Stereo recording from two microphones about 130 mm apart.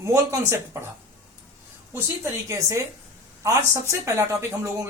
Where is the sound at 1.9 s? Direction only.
20° right (ahead or behind).